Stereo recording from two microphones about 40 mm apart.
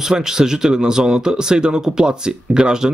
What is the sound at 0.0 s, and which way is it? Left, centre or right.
Speech, centre.